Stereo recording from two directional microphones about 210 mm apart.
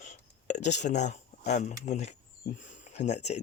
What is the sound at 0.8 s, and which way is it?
Speech, 35° left (ahead or behind).